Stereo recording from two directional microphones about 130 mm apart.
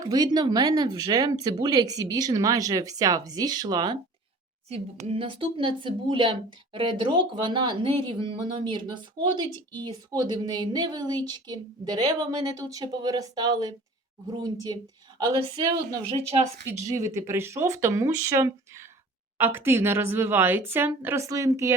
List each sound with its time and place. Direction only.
0.0 s speech: 30° right (ahead or behind)
4.7 s speech: 50° right (ahead or behind); by 14.8 s 30° right (ahead or behind)
16.6 s a woman's voice: 20° right (ahead or behind)